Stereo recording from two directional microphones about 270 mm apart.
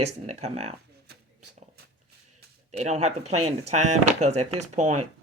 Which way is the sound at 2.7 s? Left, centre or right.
Right.